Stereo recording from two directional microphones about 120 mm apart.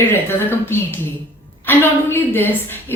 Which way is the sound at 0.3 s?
20° left (ahead or behind).